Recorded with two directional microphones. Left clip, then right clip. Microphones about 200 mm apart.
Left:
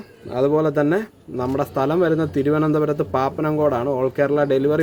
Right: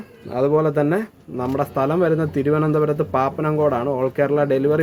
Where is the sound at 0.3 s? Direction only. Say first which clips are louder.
Even; 5° left (ahead or behind).